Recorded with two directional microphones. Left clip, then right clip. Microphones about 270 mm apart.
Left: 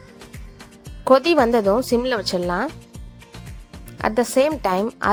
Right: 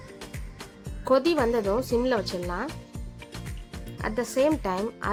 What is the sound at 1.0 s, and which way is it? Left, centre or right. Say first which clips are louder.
A woman's voice: left 7 dB; left.